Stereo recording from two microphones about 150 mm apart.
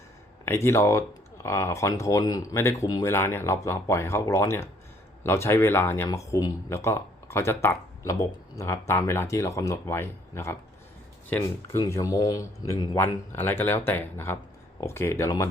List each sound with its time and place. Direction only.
0.4 s speech: 15° left (ahead or behind)
11.8 s speech: 20° left (ahead or behind)